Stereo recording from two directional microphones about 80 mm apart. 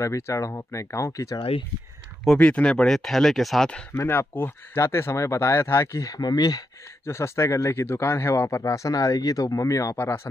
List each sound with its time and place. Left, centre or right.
0.0 s speech: left
2.3 s speech: centre
4.1 s speech: left
7.1 s speech: left
9.9 s speech: left